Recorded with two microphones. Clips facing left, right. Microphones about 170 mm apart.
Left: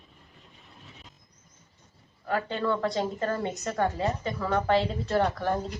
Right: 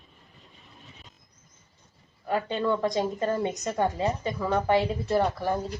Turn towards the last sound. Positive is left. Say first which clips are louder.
# even
turn(degrees=-5)  # may be behind; listen again after turning